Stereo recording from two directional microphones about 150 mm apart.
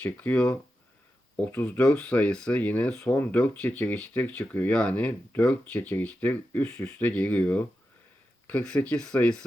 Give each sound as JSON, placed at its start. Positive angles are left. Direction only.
{"t": 0.0, "sound": "speech", "side_deg": 10}